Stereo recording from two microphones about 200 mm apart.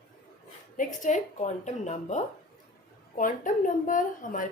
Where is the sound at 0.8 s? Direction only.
40° left (ahead or behind).